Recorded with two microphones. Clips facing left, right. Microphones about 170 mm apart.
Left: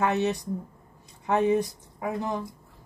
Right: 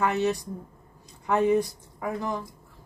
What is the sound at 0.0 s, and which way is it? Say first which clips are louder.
Speech: even; 20° left (ahead or behind).